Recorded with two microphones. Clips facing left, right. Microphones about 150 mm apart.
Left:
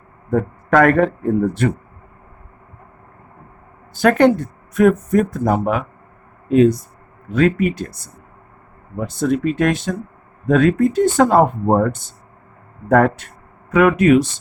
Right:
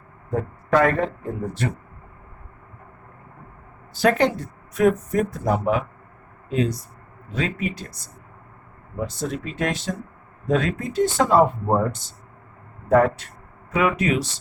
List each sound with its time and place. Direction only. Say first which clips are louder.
0.3 s a man's voice: left 5 dB; 65° left (ahead or behind)
3.9 s speech: left 6 dB; 55° left (ahead or behind)